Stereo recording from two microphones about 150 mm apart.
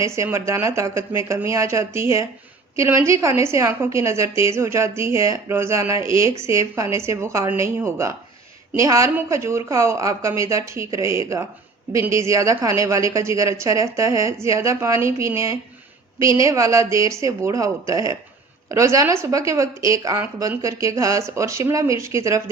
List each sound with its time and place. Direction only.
0.0 s a woman's voice: 20° right (ahead or behind)